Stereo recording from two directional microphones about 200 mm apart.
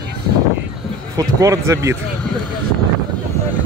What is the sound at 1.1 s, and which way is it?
Speech, 15° right (ahead or behind).